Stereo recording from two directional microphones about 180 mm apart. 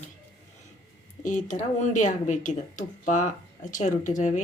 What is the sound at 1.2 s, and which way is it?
Speech, 45° left (ahead or behind).